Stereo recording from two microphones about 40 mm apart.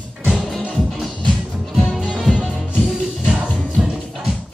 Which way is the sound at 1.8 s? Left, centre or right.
Centre.